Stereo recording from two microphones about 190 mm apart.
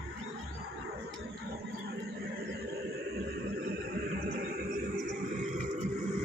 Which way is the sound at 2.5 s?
60° right (ahead or behind).